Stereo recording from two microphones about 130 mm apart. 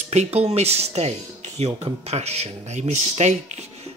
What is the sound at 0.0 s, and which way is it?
Speech, 60° right (ahead or behind).